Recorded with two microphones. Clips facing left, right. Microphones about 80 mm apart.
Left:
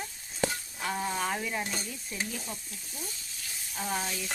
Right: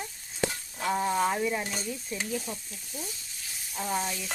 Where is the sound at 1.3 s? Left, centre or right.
Centre.